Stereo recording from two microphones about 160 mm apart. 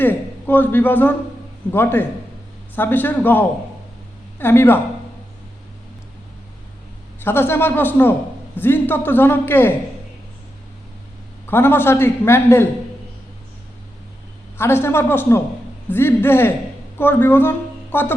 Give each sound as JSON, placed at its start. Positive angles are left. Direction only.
{"t": 0.0, "sound": "a man's voice", "side_deg": 10}
{"t": 7.2, "sound": "a man's voice", "side_deg": 15}
{"t": 11.4, "sound": "a man's voice", "side_deg": 15}
{"t": 14.6, "sound": "a man's voice", "side_deg": 15}